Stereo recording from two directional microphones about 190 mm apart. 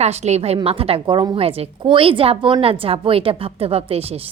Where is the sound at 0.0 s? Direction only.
35° right (ahead or behind).